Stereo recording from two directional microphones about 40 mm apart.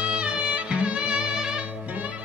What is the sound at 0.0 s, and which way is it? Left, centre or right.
Music, right.